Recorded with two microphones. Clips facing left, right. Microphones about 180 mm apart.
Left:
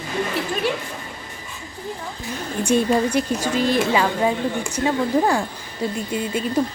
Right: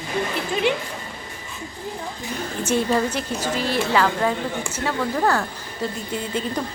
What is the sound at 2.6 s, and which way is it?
A woman's voice, 15° left (ahead or behind).